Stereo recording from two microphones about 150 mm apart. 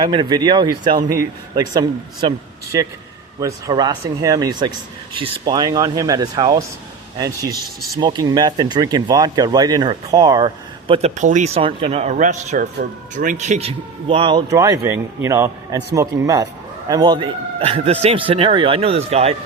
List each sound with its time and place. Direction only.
0.0 s speech: 30° right (ahead or behind)
3.4 s speech: 25° right (ahead or behind)
11.2 s a man's voice: 55° right (ahead or behind)
12.1 s a man's voice: 55° right (ahead or behind); by 14.4 s 35° right (ahead or behind)
14.5 s speech: 20° right (ahead or behind); by 19.4 s 40° right (ahead or behind)